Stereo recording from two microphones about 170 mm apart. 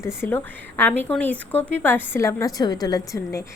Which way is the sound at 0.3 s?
10° left (ahead or behind).